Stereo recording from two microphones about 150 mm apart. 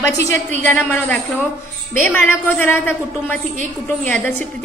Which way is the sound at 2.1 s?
15° left (ahead or behind).